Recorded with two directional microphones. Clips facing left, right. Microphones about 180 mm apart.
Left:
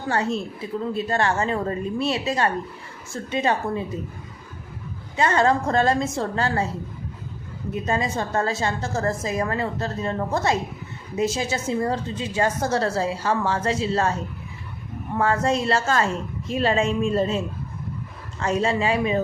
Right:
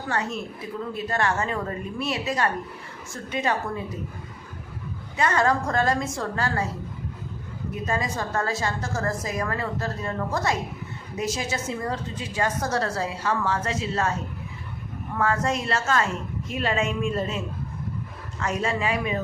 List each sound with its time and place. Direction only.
0.1 s a woman's voice: 30° left (ahead or behind)
5.1 s a woman's voice: 25° left (ahead or behind)
7.7 s a woman's voice: 25° left (ahead or behind)
15.2 s a woman's voice: 30° left (ahead or behind)